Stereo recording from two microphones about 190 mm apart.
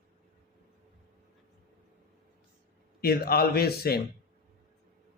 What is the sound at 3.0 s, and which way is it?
Speech, 55° left (ahead or behind).